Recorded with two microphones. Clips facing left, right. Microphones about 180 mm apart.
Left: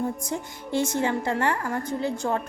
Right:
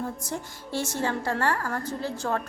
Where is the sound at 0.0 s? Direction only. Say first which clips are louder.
Left 4 dB; 20° left (ahead or behind).